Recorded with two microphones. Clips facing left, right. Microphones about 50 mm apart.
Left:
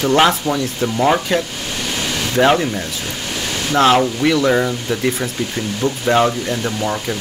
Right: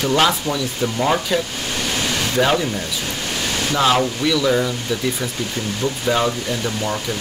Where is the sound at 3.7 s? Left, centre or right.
Left.